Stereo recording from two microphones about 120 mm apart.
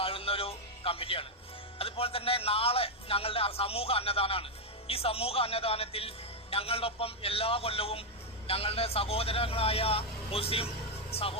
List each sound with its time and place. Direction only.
0.0 s music: 50° left (ahead or behind)
1.8 s a man's voice: 55° left (ahead or behind)